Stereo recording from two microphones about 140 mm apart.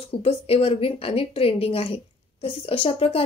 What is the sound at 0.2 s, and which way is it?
Speech, 45° left (ahead or behind).